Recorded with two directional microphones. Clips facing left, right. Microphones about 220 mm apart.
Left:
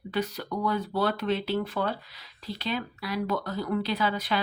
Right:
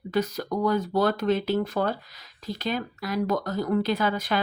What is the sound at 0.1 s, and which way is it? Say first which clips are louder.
Speech: right 4 dB; 45° right (ahead or behind).